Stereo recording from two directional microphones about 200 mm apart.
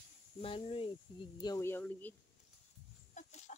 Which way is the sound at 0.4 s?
25° left (ahead or behind).